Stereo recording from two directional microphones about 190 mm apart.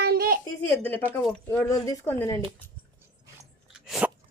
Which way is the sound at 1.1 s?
5° left (ahead or behind).